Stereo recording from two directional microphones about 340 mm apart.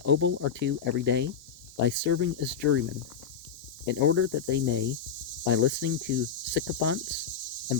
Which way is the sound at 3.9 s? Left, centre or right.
Right.